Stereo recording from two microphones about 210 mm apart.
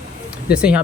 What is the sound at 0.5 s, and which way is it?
Speech, 5° right (ahead or behind).